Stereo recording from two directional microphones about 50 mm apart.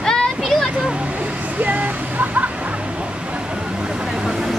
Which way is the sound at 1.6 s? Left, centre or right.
Right.